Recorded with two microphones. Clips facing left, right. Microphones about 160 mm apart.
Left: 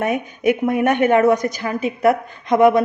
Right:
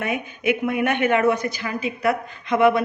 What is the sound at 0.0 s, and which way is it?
A woman's voice, 45° left (ahead or behind).